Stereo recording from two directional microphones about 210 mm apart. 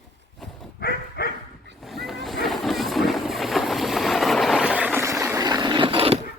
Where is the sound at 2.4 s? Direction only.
Centre (ahead or behind); by 6.2 s 25° right (ahead or behind).